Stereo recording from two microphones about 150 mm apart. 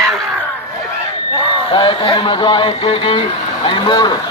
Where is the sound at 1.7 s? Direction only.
30° left (ahead or behind).